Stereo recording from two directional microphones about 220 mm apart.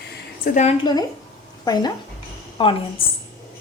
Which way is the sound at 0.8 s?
20° left (ahead or behind).